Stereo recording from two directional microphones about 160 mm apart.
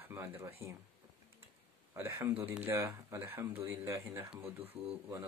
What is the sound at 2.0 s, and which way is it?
Speech, 15° right (ahead or behind).